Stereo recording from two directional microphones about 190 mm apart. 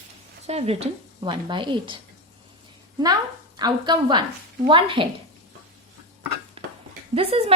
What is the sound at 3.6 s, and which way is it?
Speech, 20° right (ahead or behind).